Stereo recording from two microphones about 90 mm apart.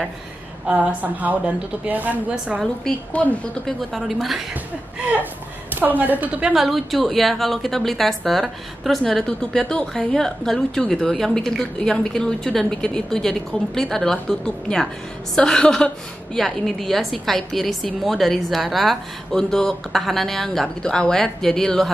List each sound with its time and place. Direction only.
0.7 s a woman's voice: 15° right (ahead or behind)
3.1 s a woman's voice: 15° left (ahead or behind)
3.6 s a woman's voice: centre (ahead or behind)
5.8 s a woman's voice: 20° right (ahead or behind)
6.5 s a woman's voice: centre (ahead or behind)